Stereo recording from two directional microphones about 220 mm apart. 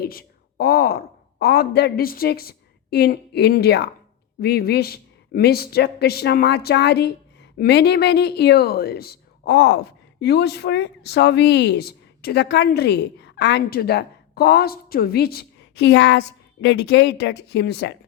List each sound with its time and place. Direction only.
0.0 s speech: 45° left (ahead or behind)